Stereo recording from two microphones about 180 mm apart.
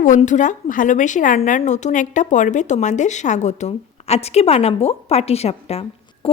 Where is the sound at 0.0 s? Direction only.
45° left (ahead or behind).